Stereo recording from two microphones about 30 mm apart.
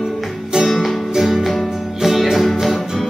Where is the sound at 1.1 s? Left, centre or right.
Centre.